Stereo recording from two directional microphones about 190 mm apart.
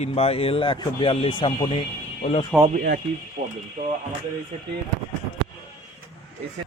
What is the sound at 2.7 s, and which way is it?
Speech, 55° right (ahead or behind).